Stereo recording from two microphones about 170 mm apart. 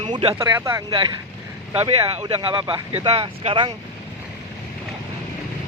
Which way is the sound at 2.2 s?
30° right (ahead or behind).